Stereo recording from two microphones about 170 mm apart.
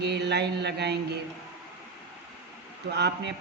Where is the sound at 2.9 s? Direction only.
80° right.